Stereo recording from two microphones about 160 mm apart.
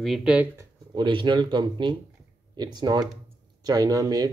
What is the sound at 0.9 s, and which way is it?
Speech, 30° right (ahead or behind).